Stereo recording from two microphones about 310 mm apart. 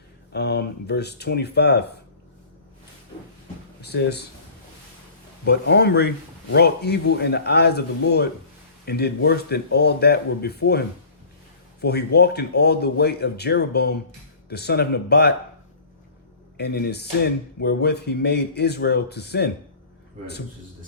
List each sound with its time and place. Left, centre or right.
0.3 s speech: left
3.8 s speech: left
5.5 s speech: left
16.6 s speech: left